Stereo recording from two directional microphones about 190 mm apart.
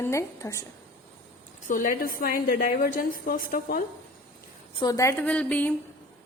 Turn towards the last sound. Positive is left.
turn(degrees=5)  # may be behind; listen again after turning